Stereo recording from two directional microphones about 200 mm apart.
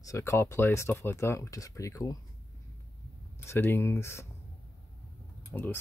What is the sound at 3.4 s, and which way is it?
Speech, 10° left (ahead or behind).